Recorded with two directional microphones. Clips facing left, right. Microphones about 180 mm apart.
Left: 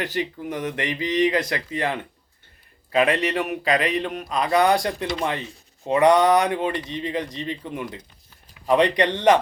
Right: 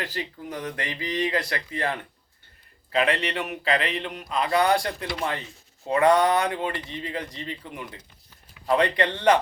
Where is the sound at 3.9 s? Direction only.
20° right (ahead or behind).